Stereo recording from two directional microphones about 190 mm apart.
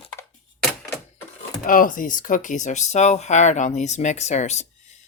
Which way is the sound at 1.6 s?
45° left (ahead or behind).